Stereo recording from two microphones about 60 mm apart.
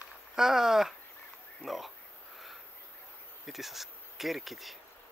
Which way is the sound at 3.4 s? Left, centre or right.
Centre.